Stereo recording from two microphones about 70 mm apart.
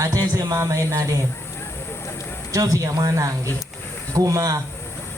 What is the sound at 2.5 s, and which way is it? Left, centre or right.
A man's voice, right.